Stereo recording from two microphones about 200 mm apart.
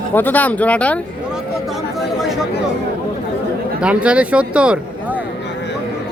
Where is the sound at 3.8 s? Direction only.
5° right (ahead or behind).